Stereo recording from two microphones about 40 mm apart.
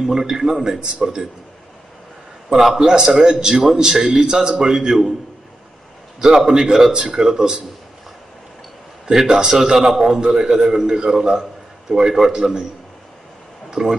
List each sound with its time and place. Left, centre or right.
0.0 s a man's voice: centre
2.5 s a man's voice: centre
6.2 s a man's voice: centre
9.0 s a man's voice: centre
13.7 s a sound: centre